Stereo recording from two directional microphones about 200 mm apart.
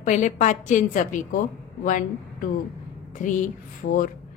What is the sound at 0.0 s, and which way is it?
A woman's voice, 40° left (ahead or behind).